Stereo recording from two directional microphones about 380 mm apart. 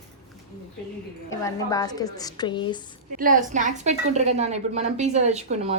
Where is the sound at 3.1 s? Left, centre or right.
Right.